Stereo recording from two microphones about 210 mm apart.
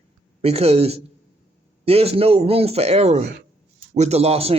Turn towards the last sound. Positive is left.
turn(degrees=-30)  # may be behind; listen again after turning